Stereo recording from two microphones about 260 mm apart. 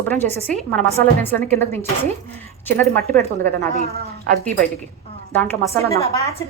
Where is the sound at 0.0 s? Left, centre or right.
Centre.